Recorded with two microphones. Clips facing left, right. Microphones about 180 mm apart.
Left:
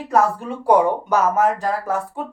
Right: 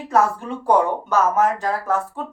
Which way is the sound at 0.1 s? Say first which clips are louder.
Left 1 dB; 10° left (ahead or behind).